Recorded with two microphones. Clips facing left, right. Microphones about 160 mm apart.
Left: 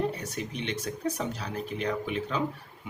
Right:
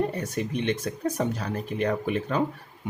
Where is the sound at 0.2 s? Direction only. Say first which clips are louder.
Right 6 dB; 50° right (ahead or behind).